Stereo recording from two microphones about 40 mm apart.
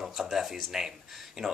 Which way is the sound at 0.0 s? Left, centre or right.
Centre.